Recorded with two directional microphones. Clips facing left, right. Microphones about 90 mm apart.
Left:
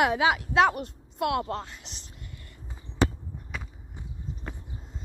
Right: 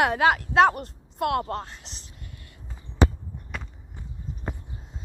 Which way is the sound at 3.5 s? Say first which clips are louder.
Right 2 dB; centre (ahead or behind).